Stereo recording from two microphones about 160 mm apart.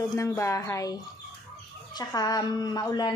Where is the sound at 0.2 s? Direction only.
20° left (ahead or behind).